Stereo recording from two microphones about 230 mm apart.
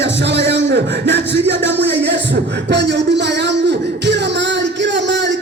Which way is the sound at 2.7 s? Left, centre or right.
Right.